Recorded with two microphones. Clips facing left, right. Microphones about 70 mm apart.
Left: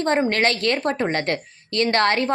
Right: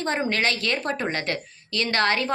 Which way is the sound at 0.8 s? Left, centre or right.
Left.